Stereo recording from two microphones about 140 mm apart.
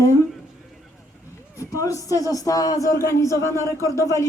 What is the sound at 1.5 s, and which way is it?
Speech, 25° left (ahead or behind).